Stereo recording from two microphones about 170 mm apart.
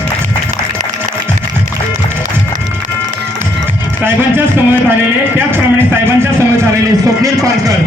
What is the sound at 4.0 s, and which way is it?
Speech, 10° right (ahead or behind).